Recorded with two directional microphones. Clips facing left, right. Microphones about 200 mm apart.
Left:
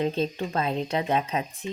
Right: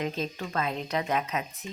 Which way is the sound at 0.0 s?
30° left (ahead or behind).